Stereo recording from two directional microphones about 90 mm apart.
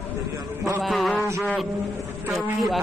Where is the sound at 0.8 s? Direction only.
Centre (ahead or behind).